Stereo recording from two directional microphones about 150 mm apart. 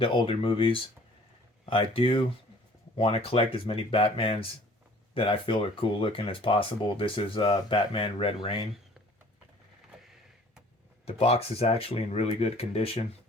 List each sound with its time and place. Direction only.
0.0 s speech: 35° left (ahead or behind)
11.0 s speech: 40° left (ahead or behind)